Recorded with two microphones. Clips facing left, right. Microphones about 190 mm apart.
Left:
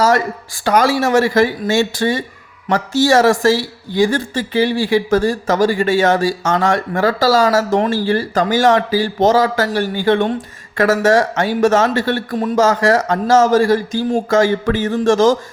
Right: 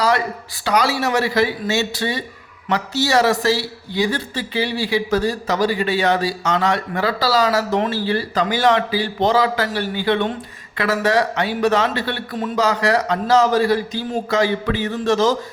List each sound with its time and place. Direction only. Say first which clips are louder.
0.0 s a man's voice: left 4 dB; 45° left (ahead or behind)